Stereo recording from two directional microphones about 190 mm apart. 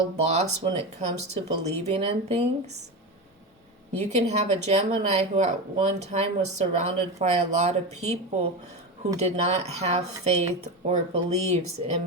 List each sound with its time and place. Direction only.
0.6 s speech: 35° right (ahead or behind)
3.9 s speech: 35° right (ahead or behind)